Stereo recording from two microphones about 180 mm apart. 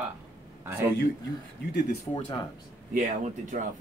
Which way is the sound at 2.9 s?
45° right (ahead or behind).